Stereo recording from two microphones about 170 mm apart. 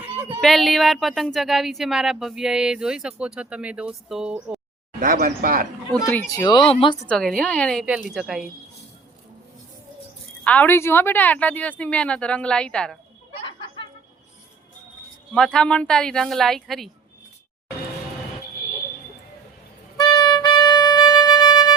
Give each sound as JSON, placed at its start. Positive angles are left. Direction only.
{"t": 0.4, "sound": "a woman's voice", "side_deg": 0}
{"t": 4.9, "sound": "speech", "side_deg": -55}
{"t": 5.9, "sound": "a woman's voice", "side_deg": 10}
{"t": 6.3, "sound": "speech", "side_deg": 25}
{"t": 7.0, "sound": "a woman's voice", "side_deg": 5}
{"t": 10.4, "sound": "a woman's voice", "side_deg": 10}
{"t": 13.4, "sound": "chatter", "side_deg": 30}
{"t": 15.4, "sound": "a woman's voice", "side_deg": 5}
{"t": 20.0, "sound": "music", "side_deg": 25}